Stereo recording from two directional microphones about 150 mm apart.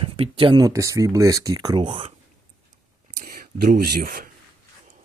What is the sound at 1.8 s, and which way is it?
Speech, 40° right (ahead or behind).